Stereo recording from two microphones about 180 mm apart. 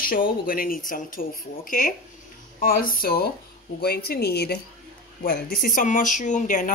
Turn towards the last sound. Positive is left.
turn(degrees=45)  # may be behind; listen again after turning